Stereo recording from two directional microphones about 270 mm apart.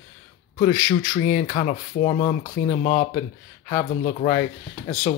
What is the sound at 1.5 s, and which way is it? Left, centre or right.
Speech, left.